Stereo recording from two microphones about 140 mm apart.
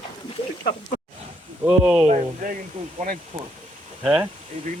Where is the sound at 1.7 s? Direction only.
10° right (ahead or behind).